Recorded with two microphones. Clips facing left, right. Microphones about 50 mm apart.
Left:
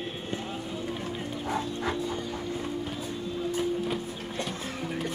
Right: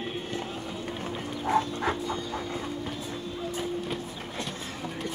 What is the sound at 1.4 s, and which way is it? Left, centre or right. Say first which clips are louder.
Dog: right 5 dB; right.